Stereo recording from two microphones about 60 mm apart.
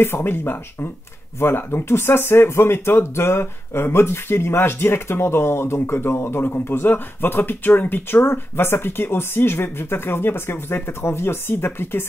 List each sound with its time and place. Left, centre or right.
0.0 s speech: left